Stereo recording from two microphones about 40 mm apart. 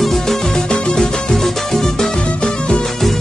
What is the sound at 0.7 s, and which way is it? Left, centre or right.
Music, left.